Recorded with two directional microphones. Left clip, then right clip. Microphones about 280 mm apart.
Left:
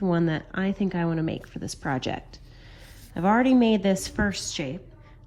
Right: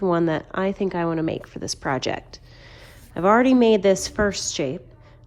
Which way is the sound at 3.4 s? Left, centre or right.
Right.